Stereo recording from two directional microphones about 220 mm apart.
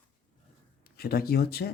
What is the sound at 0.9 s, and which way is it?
Speech, 45° left (ahead or behind).